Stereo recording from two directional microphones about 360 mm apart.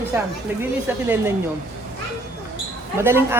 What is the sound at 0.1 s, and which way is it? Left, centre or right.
Speech, centre.